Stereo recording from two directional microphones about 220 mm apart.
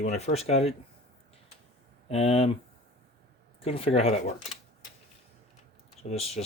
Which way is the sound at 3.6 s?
25° left (ahead or behind).